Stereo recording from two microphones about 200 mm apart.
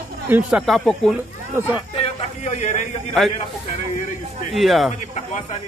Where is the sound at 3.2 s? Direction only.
Centre (ahead or behind).